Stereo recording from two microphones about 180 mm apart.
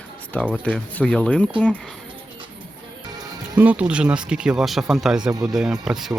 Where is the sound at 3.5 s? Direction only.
10° right (ahead or behind).